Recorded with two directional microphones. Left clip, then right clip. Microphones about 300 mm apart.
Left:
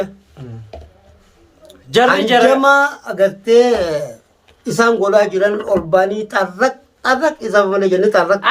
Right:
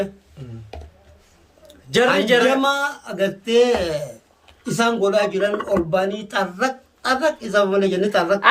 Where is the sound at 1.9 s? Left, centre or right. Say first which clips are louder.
Left 4 dB; centre.